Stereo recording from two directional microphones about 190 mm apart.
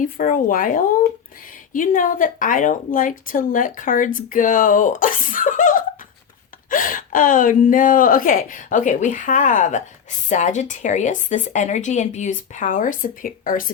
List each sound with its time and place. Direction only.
0.0 s a woman's voice: 45° left (ahead or behind)